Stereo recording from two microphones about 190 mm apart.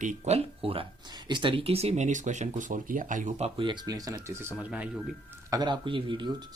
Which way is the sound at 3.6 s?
20° right (ahead or behind).